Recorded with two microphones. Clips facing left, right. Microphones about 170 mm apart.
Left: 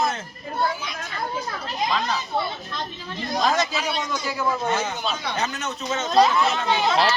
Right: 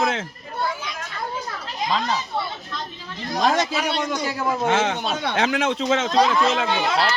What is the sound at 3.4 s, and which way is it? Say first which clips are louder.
A man's voice: right 3 dB; 60° right (ahead or behind).